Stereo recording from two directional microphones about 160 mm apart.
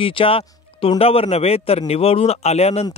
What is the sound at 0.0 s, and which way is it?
A man's voice, 35° left (ahead or behind).